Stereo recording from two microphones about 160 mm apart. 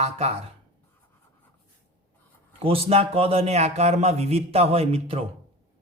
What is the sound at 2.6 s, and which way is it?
A man's voice, 35° right (ahead or behind).